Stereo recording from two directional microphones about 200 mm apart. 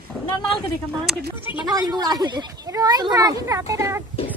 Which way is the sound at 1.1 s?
Centre (ahead or behind).